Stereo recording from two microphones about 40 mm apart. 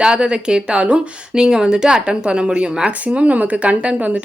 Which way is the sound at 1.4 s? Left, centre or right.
Centre.